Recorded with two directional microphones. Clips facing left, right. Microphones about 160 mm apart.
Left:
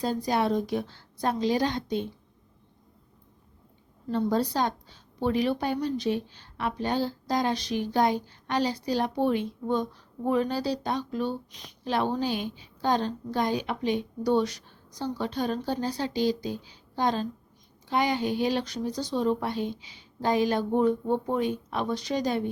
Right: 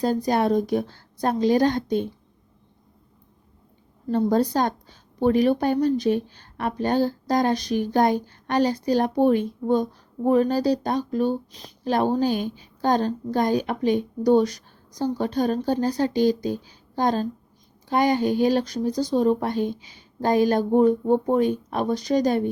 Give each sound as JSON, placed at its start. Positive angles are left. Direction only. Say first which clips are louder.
{"t": 0.0, "sound": "a woman's voice", "louder": "right 5 dB", "side_deg": -45}
{"t": 4.1, "sound": "a woman's voice", "louder": "right 5 dB", "side_deg": -45}